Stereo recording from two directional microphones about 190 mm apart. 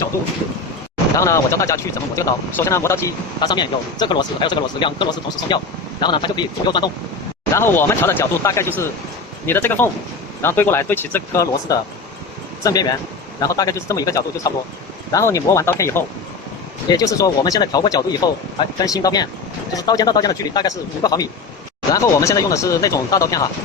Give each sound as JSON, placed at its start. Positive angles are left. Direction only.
{"t": 1.1, "sound": "a man's voice", "side_deg": 15}
{"t": 7.5, "sound": "a man's voice", "side_deg": 10}